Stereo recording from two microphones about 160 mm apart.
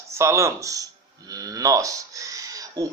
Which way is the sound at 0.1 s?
15° right (ahead or behind).